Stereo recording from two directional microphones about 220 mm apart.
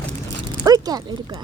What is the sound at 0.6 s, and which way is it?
Speech, 15° right (ahead or behind).